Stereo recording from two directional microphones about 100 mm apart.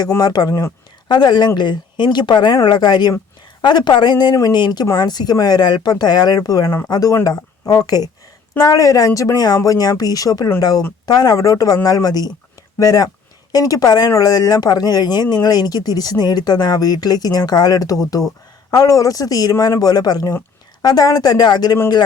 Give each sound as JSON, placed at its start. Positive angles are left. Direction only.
{"t": 0.2, "sound": "speech", "side_deg": 40}
{"t": 1.0, "sound": "speech", "side_deg": 45}
{"t": 6.7, "sound": "speech", "side_deg": 25}
{"t": 6.9, "sound": "speech", "side_deg": 35}